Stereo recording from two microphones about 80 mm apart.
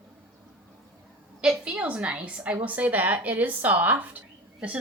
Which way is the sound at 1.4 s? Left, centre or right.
Centre.